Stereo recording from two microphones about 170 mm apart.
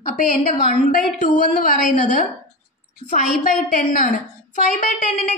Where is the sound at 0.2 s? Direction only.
60° left (ahead or behind).